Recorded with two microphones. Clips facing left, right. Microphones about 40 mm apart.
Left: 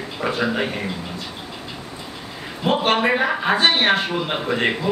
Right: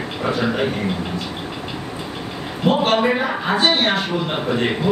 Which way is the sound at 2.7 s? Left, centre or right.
Centre.